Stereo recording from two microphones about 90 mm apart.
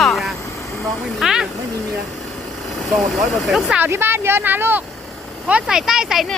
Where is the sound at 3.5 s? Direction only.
5° right (ahead or behind).